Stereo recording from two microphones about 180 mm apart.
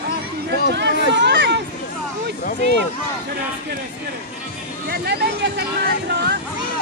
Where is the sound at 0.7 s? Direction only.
70° right (ahead or behind).